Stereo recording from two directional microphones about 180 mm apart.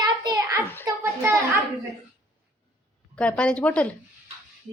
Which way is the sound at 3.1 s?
5° left (ahead or behind).